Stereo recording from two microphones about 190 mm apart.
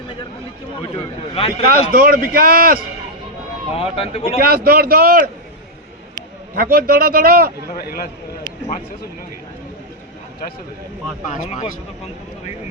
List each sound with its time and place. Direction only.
1.6 s a man's voice: 50° right (ahead or behind)
3.8 s speech: 30° left (ahead or behind)
4.4 s a man's voice: 50° right (ahead or behind)
6.6 s a man's voice: 50° right (ahead or behind)
7.8 s speech: 50° left (ahead or behind)
11.3 s speech: 40° left (ahead or behind)